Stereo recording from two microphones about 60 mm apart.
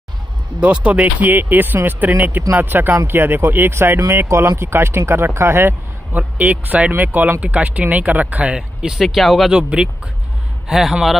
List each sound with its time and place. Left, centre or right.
0.6 s speech: right
6.1 s speech: right
9.0 s speech: centre
9.5 s speech: centre
10.7 s speech: centre